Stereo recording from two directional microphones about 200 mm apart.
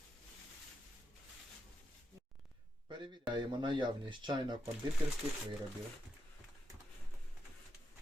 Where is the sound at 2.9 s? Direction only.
20° right (ahead or behind).